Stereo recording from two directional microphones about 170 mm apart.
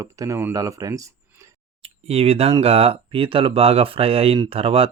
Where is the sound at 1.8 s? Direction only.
35° right (ahead or behind).